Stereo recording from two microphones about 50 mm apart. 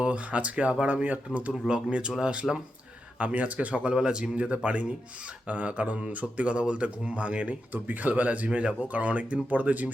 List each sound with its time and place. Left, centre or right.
0.0 s speech: right
1.6 s speech: centre
3.9 s speech: centre
7.7 s speech: right